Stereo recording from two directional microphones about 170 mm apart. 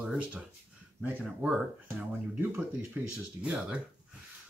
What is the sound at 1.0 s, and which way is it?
Speech, 5° right (ahead or behind).